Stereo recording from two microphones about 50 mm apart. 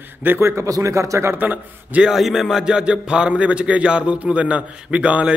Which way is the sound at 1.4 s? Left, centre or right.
Right.